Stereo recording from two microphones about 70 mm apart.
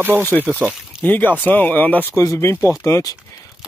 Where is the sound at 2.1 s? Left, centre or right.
Left.